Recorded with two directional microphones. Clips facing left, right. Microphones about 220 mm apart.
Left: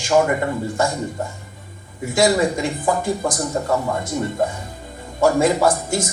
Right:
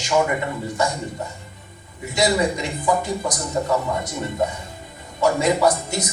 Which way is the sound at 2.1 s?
50° left (ahead or behind).